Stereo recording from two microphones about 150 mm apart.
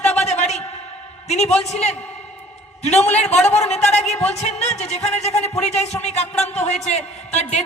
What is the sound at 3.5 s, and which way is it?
A man's voice, 45° left (ahead or behind).